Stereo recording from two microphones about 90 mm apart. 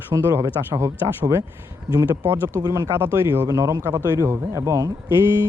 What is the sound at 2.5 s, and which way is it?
Speech, 40° right (ahead or behind).